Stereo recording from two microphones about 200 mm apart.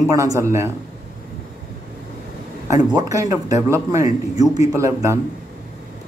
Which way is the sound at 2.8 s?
20° right (ahead or behind).